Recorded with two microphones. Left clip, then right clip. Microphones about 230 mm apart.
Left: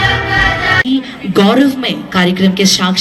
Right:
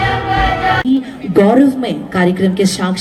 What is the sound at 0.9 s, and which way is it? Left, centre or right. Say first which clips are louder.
A woman's voice: even; right.